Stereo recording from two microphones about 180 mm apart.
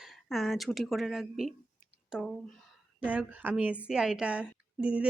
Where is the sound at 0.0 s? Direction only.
Centre (ahead or behind).